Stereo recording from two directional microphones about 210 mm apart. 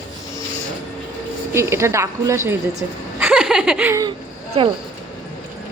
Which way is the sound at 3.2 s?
5° right (ahead or behind).